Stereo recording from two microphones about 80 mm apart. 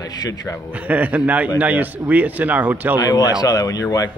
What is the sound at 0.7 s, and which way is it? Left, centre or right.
Speech, centre.